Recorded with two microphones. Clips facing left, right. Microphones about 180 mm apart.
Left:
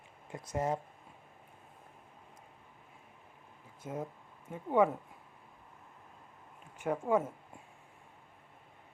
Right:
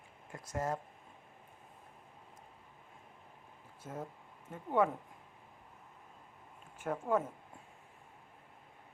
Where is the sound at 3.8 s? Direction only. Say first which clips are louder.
Left 4 dB; 10° left (ahead or behind).